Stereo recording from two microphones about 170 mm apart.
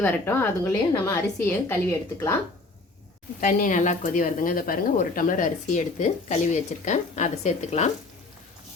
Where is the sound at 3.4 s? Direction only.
50° left (ahead or behind).